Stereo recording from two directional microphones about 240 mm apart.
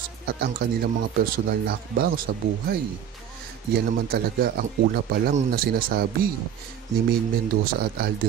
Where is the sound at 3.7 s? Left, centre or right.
Right.